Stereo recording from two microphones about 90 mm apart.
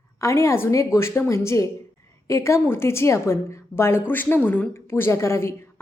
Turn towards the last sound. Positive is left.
turn(degrees=30)  # may be behind; listen again after turning